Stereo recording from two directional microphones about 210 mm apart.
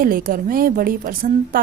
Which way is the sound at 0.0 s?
40° right (ahead or behind).